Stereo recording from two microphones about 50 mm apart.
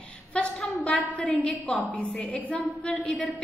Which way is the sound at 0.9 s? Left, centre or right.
Left.